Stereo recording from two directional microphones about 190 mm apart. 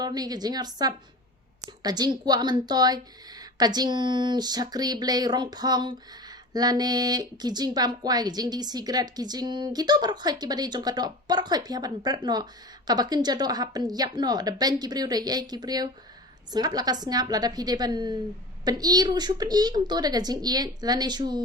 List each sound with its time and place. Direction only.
0.0 s speech: 20° right (ahead or behind)